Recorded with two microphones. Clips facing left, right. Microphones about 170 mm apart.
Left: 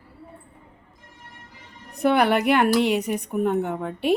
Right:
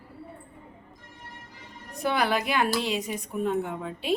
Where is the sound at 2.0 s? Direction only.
60° left (ahead or behind).